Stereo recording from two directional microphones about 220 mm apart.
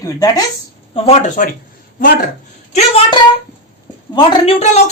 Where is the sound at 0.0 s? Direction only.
15° left (ahead or behind).